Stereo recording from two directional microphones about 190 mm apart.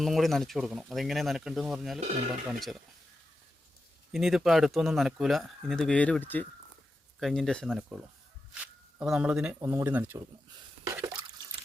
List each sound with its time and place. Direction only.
0.0 s speech: centre (ahead or behind)
4.1 s speech: centre (ahead or behind)
9.0 s speech: 5° right (ahead or behind)
10.8 s drip: 15° right (ahead or behind)